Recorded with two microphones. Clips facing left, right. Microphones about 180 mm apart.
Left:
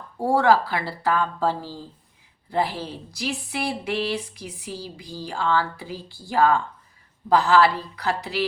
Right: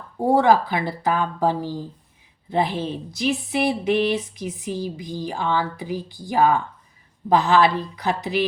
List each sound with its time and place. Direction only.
0.2 s speech: 20° right (ahead or behind)